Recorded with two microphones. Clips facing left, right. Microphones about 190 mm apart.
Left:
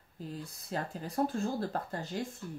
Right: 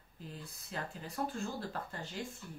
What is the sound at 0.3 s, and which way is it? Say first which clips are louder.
Speech: left 7 dB; 40° left (ahead or behind).